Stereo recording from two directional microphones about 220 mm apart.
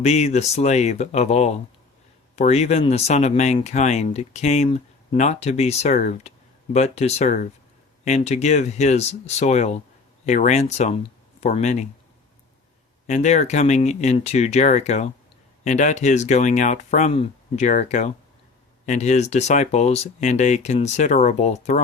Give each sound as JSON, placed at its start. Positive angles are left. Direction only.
{"t": 0.0, "sound": "speech", "side_deg": 30}
{"t": 13.1, "sound": "speech", "side_deg": 35}